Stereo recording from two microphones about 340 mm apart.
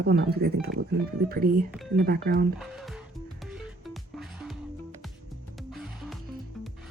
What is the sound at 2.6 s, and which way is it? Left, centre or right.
Music, centre.